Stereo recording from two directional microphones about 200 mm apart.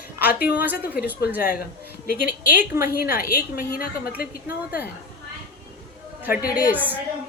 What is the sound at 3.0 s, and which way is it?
Speech, 50° left (ahead or behind).